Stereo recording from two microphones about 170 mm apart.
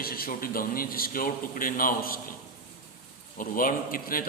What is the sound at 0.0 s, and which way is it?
A man's voice, 60° left (ahead or behind).